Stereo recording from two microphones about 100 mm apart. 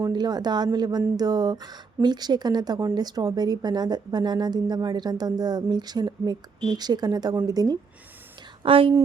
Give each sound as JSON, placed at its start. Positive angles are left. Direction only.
{"t": 0.1, "sound": "a woman's voice", "side_deg": -45}
{"t": 8.6, "sound": "a woman's voice", "side_deg": -65}